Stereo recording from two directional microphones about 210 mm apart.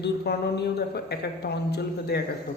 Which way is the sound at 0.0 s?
50° left (ahead or behind).